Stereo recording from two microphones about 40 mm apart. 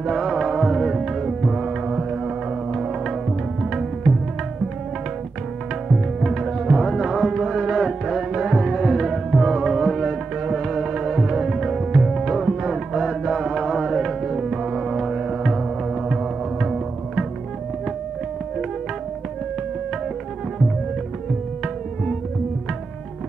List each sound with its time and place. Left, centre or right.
0.0 s music: centre
5.9 s music: centre